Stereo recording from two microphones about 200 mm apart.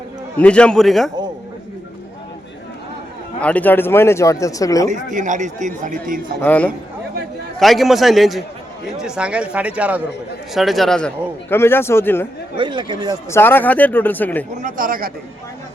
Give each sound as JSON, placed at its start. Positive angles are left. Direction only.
{"t": 0.3, "sound": "speech", "side_deg": 5}
{"t": 3.4, "sound": "speech", "side_deg": 10}
{"t": 4.9, "sound": "speech", "side_deg": -40}
{"t": 6.4, "sound": "speech", "side_deg": 5}
{"t": 12.5, "sound": "speech", "side_deg": -25}
{"t": 13.3, "sound": "speech", "side_deg": 10}
{"t": 14.5, "sound": "speech", "side_deg": -40}